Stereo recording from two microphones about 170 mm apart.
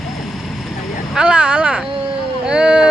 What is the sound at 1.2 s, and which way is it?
Speech, 5° right (ahead or behind).